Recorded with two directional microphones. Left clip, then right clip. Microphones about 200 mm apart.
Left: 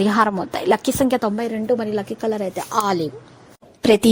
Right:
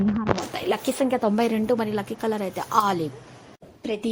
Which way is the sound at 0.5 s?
40° left (ahead or behind).